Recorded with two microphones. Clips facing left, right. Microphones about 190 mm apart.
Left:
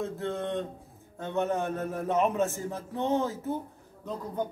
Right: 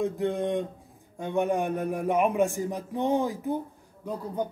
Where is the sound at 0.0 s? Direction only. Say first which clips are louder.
Right 5 dB; 15° right (ahead or behind).